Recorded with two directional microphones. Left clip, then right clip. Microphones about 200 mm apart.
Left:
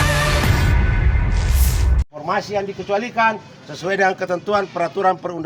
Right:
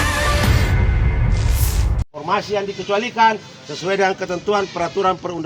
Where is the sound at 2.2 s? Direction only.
20° left (ahead or behind).